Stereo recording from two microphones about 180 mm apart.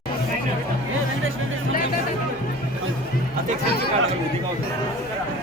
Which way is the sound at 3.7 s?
60° left (ahead or behind).